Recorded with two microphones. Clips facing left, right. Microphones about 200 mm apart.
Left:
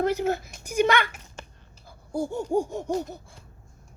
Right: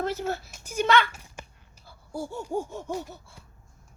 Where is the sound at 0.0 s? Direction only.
15° left (ahead or behind).